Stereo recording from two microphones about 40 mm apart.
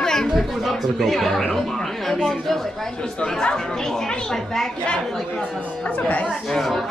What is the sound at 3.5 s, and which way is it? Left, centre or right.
Speech, centre.